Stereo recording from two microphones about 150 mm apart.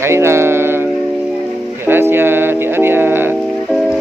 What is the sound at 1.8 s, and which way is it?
Speech, 15° right (ahead or behind).